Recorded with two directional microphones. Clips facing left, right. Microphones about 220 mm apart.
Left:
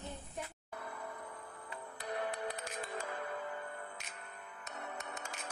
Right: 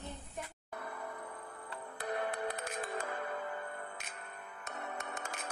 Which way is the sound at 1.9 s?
55° right (ahead or behind).